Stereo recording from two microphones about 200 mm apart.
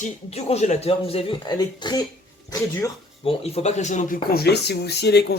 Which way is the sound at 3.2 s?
30° left (ahead or behind).